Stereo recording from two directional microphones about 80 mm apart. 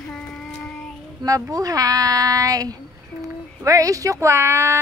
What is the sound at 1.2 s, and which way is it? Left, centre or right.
Speech, right.